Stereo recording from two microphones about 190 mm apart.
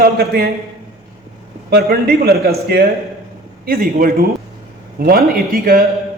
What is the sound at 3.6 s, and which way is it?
A man's voice, 50° right (ahead or behind).